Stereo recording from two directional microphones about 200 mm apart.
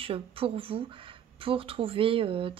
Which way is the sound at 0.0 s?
25° right (ahead or behind).